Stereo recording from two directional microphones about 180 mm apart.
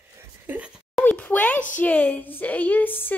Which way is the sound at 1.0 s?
10° left (ahead or behind).